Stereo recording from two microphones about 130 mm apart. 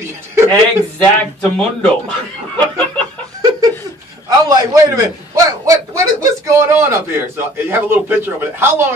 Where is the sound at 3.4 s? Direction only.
25° right (ahead or behind).